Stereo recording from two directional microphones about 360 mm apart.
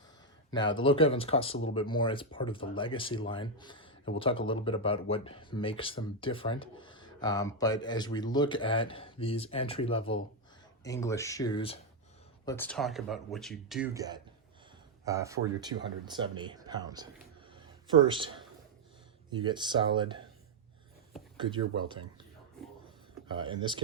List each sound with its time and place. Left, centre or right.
0.5 s speech: centre
17.5 s a sound: centre
19.3 s speech: centre
21.3 s speech: centre
23.3 s speech: centre